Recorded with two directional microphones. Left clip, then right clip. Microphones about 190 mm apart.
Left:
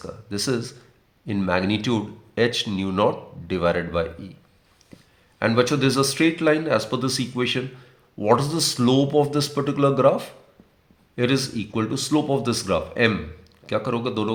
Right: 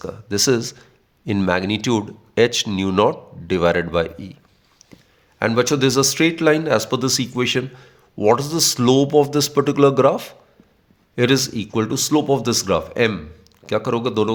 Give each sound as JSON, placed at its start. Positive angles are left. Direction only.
{"t": 0.0, "sound": "speech", "side_deg": -50}
{"t": 5.4, "sound": "speech", "side_deg": -45}